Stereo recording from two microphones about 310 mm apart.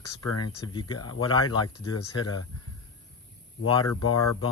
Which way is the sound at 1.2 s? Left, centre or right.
Left.